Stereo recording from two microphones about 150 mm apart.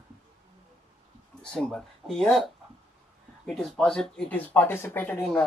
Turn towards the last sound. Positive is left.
turn(degrees=10)  # may be behind; listen again after turning